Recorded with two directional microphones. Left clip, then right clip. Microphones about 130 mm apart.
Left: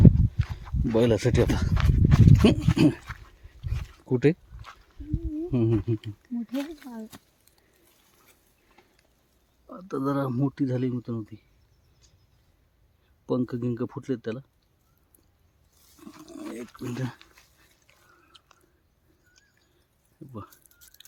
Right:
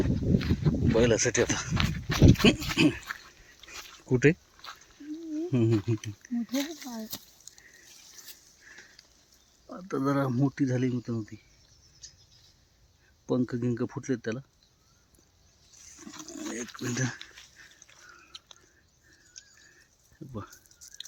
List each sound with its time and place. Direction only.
0.0 s a sound: 20° left (ahead or behind)
0.9 s speech: 15° left (ahead or behind)
1.7 s pig: 15° left (ahead or behind)
2.7 s pig: 40° left (ahead or behind)
3.0 s dog: 5° left (ahead or behind)
3.2 s dog: 20° left (ahead or behind)
4.1 s a sound: 15° left (ahead or behind)
6.5 s speech: 5° right (ahead or behind)
7.5 s a sound: 40° left (ahead or behind)
9.6 s speech: 5° right (ahead or behind)
13.2 s speech: 5° left (ahead or behind)
16.0 s a sound: 5° right (ahead or behind)
16.4 s wild animals: centre (ahead or behind)
16.7 s speech: 5° right (ahead or behind)